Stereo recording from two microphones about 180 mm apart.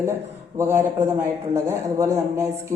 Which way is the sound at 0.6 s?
15° right (ahead or behind).